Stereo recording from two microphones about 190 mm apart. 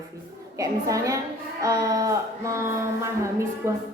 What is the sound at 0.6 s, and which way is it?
A woman's voice, 15° right (ahead or behind).